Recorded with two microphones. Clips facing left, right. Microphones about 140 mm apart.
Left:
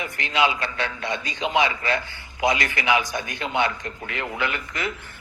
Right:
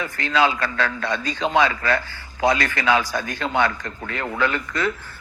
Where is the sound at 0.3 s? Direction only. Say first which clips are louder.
Right 3 dB; 40° right (ahead or behind).